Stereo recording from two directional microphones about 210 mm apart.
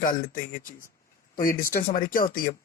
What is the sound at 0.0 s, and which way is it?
Speech, 40° left (ahead or behind).